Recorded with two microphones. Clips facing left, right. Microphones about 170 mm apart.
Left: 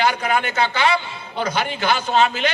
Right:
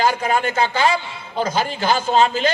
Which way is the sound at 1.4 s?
35° right (ahead or behind).